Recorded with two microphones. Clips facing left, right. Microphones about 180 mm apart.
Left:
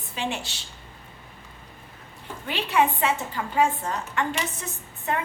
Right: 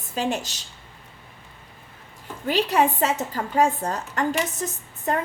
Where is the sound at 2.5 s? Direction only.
40° right (ahead or behind).